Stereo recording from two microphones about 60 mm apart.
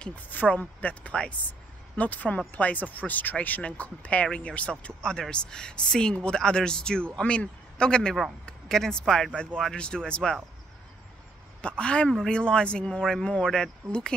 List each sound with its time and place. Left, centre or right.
0.0 s a man's voice: left
11.6 s a man's voice: centre